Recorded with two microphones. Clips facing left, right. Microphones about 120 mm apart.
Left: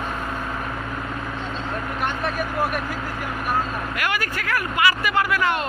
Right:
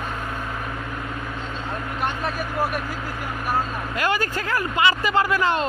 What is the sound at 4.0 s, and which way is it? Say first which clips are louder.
Speech: right 5 dB; 30° right (ahead or behind).